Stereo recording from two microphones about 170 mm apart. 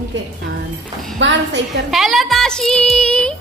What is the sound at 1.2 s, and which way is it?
Speech, 90° right.